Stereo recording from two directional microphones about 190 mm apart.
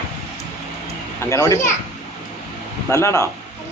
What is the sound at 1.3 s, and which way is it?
Speech, 15° left (ahead or behind).